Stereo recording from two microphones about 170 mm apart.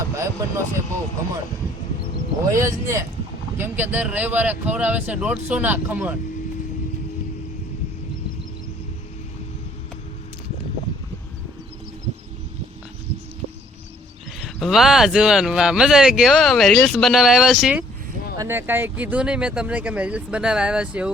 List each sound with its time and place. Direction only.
0.0 s speech: 20° right (ahead or behind)
2.5 s speech: 15° right (ahead or behind)
14.4 s speech: centre (ahead or behind)